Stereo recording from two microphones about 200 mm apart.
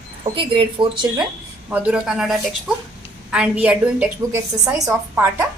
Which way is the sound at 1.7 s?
5° right (ahead or behind).